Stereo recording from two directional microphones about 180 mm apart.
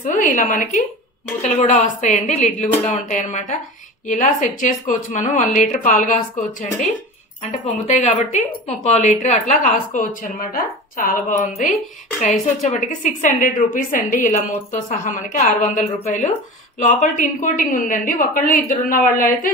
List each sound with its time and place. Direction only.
0.0 s a woman's voice: 45° left (ahead or behind)
7.4 s a woman's voice: 40° left (ahead or behind)